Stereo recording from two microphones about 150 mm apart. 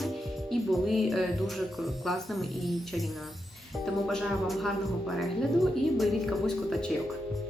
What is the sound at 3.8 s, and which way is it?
Music, centre (ahead or behind).